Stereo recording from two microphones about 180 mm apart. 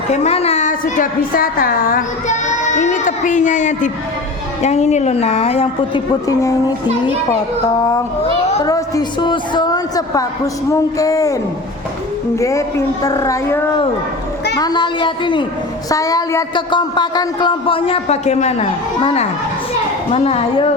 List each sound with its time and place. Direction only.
0.1 s a woman's voice: 35° left (ahead or behind)
6.2 s speech: 15° left (ahead or behind)
8.6 s speech: 20° left (ahead or behind)
12.4 s a woman's voice: 15° left (ahead or behind); by 20.7 s 35° left (ahead or behind)